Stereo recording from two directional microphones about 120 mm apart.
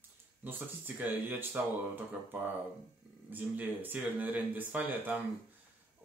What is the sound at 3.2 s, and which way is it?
Speech, 15° right (ahead or behind).